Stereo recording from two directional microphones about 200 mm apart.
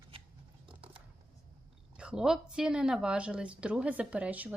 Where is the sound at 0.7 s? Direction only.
25° right (ahead or behind).